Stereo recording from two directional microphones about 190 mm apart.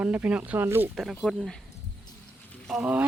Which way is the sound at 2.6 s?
5° right (ahead or behind).